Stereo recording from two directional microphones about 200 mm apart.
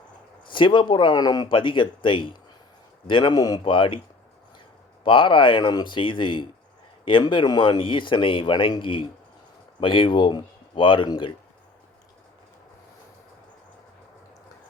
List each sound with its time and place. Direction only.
0.4 s speech: 25° left (ahead or behind)
5.0 s speech: 25° left (ahead or behind)